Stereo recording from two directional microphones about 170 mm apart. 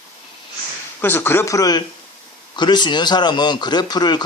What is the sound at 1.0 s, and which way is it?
Speech, 15° left (ahead or behind).